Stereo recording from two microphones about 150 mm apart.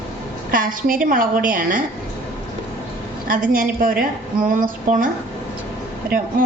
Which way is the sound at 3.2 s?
65° right (ahead or behind).